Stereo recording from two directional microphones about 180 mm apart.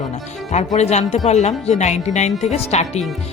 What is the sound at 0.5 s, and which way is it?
Speech, 40° left (ahead or behind).